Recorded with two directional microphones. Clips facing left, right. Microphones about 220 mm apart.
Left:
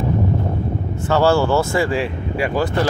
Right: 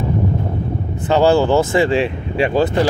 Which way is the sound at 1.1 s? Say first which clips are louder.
Right 3 dB; 15° right (ahead or behind).